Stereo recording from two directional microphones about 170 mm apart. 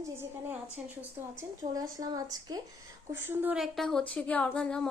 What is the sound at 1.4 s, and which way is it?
Speech, 20° right (ahead or behind).